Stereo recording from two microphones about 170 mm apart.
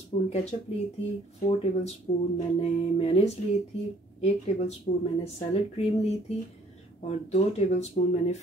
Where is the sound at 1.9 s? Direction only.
35° left (ahead or behind).